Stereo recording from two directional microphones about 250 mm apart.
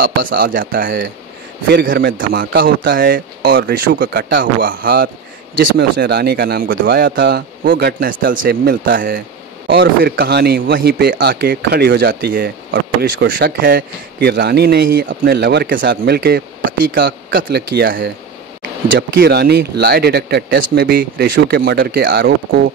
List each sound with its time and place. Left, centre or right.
0.0 s speech: right